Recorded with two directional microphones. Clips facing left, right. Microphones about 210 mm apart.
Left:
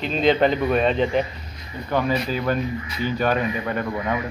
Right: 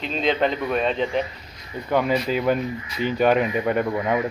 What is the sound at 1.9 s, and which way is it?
Speech, 15° right (ahead or behind).